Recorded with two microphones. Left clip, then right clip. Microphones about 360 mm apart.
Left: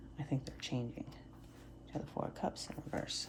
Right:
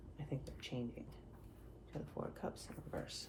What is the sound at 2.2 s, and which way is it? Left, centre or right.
Speech, left.